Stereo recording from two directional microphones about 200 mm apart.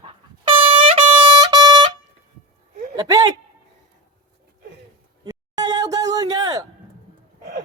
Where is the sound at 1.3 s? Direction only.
20° right (ahead or behind).